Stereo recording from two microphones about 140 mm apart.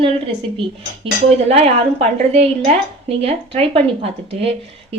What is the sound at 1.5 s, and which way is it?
A woman's voice, 50° right (ahead or behind).